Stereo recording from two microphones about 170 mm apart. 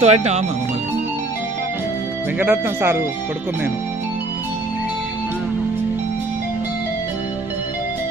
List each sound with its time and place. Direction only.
0.0 s speech: 40° right (ahead or behind)
2.4 s speech: 10° right (ahead or behind)